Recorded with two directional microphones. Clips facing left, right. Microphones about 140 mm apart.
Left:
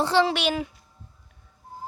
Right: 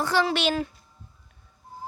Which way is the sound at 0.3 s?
10° left (ahead or behind).